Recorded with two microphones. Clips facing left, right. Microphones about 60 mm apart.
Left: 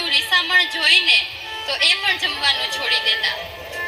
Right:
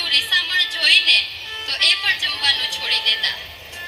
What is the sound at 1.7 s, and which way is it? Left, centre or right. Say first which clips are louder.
A woman's voice: even; left.